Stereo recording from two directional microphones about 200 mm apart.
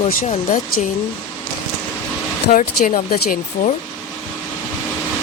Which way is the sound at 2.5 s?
45° left (ahead or behind).